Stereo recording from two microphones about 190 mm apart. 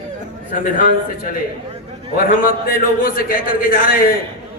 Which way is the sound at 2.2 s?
50° left (ahead or behind).